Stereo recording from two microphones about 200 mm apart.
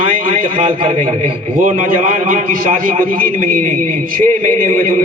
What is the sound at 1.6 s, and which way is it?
A man's voice, 40° right (ahead or behind).